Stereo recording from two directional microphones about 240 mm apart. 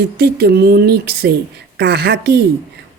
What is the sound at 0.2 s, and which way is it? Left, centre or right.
Speech, right.